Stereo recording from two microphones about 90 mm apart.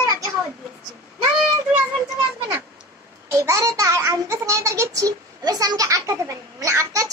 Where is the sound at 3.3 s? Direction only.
35° right (ahead or behind).